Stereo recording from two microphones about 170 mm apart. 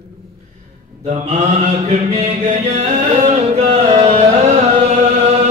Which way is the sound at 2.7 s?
40° right (ahead or behind).